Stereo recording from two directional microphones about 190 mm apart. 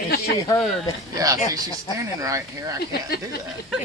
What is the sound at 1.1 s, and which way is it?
Speech, 20° right (ahead or behind).